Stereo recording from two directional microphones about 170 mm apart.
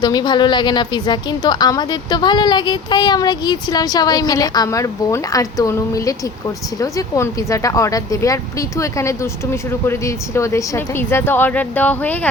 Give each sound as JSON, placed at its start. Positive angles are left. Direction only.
{"t": 0.0, "sound": "a woman's voice", "side_deg": 25}